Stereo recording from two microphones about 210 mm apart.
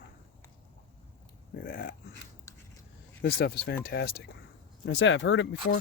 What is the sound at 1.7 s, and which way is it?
Speech, 45° left (ahead or behind).